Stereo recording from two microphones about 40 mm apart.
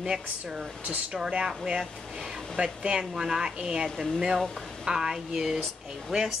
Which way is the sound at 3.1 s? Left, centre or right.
Centre.